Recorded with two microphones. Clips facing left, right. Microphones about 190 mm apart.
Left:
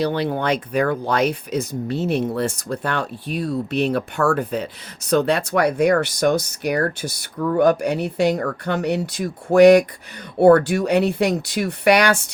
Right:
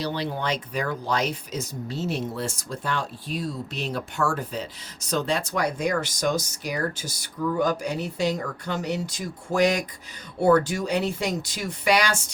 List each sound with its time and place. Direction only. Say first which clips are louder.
0.0 s speech: left 7 dB; 55° left (ahead or behind)